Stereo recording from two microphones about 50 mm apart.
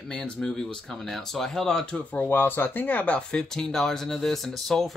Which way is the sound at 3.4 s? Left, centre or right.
Centre.